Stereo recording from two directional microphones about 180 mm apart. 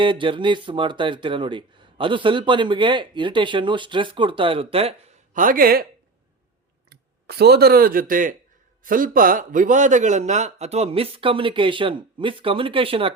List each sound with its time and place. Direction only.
0.0 s speech: 30° right (ahead or behind)
5.3 s speech: 50° right (ahead or behind)
6.9 s a man's voice: 65° right (ahead or behind); by 13.1 s 30° right (ahead or behind)